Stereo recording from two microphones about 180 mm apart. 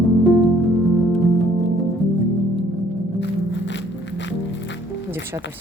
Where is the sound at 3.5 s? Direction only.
80° left.